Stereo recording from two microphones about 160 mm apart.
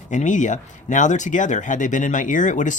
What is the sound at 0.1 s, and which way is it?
Speech, 50° left (ahead or behind).